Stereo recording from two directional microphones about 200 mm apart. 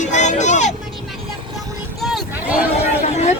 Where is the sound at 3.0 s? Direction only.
35° left (ahead or behind).